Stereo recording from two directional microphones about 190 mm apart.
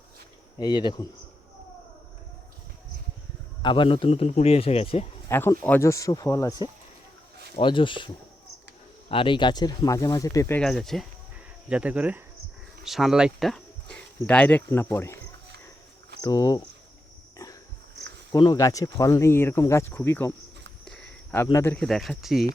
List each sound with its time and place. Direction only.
0.6 s speech: 25° left (ahead or behind)
3.6 s speech: 25° left (ahead or behind)
5.3 s speech: 10° left (ahead or behind)
10.6 s speech: centre (ahead or behind)
16.2 s speech: 20° left (ahead or behind)
17.3 s pig: 20° left (ahead or behind)
18.3 s speech: 20° left (ahead or behind)
20.8 s cricket: 5° left (ahead or behind)
21.8 s speech: centre (ahead or behind)